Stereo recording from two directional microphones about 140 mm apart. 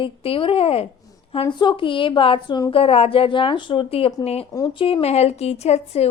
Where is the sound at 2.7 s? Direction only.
45° left (ahead or behind).